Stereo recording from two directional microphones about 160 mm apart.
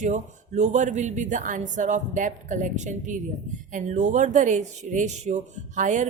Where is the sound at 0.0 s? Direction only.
50° right (ahead or behind).